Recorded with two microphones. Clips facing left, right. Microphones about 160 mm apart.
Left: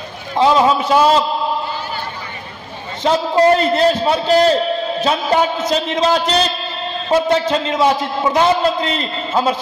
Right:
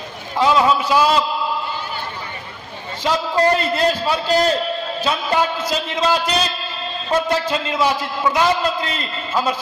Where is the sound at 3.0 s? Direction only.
30° left (ahead or behind).